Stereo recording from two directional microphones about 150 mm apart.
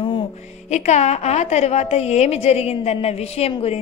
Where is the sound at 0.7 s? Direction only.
50° left (ahead or behind).